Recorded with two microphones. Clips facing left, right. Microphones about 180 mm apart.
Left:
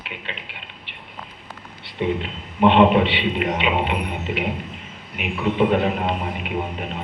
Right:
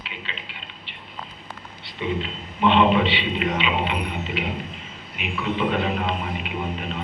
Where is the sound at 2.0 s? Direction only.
55° left (ahead or behind).